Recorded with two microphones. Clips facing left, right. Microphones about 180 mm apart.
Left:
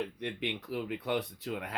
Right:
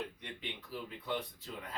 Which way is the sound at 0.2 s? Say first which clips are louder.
Left 10 dB; 70° left (ahead or behind).